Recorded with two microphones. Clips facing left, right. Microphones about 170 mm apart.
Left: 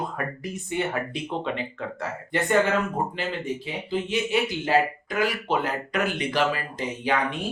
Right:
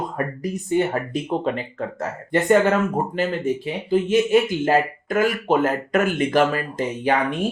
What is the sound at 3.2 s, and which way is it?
Speech, 45° right (ahead or behind).